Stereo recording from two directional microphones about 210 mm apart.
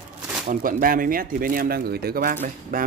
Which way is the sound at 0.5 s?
40° right (ahead or behind).